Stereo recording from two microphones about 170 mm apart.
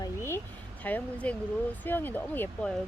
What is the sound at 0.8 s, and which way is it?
Speech, 10° left (ahead or behind).